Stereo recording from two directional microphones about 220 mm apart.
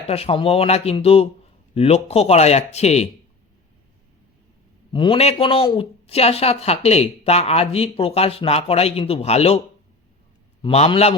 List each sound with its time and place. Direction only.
0.1 s speech: 25° left (ahead or behind)
4.9 s speech: 20° left (ahead or behind)
10.6 s speech: 25° left (ahead or behind)